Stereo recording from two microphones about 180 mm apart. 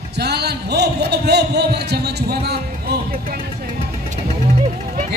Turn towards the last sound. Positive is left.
turn(degrees=-40)  # may be behind; listen again after turning